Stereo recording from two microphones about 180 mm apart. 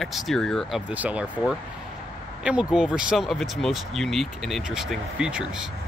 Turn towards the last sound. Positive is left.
turn(degrees=-5)  # may be behind; listen again after turning